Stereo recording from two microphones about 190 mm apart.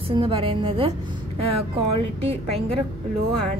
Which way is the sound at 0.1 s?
25° right (ahead or behind).